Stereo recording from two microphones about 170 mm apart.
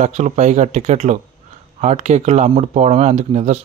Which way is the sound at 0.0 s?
45° right (ahead or behind).